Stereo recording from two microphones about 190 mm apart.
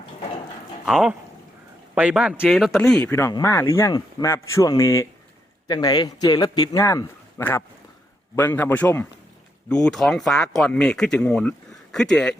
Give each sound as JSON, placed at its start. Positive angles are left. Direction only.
{"t": 0.9, "sound": "speech", "side_deg": -5}
{"t": 3.1, "sound": "a man's voice", "side_deg": 15}